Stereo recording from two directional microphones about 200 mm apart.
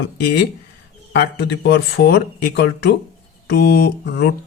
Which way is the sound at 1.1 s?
55° left (ahead or behind).